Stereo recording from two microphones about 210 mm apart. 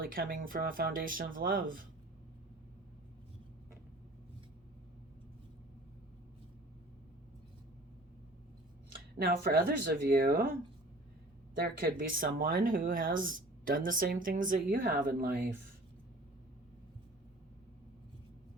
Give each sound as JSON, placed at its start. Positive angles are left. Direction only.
{"t": 0.0, "sound": "speech", "side_deg": -45}
{"t": 9.1, "sound": "speech", "side_deg": -45}
{"t": 11.6, "sound": "speech", "side_deg": -45}